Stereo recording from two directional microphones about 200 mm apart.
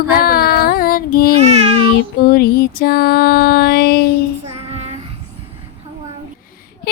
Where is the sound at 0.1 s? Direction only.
50° left (ahead or behind).